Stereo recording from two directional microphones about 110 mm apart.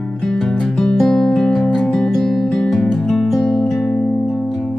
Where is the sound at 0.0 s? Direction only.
5° left (ahead or behind).